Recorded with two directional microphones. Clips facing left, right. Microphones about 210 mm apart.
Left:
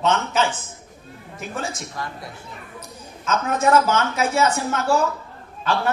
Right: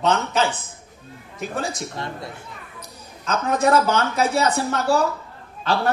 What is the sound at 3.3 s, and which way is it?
A man's voice, 35° right (ahead or behind).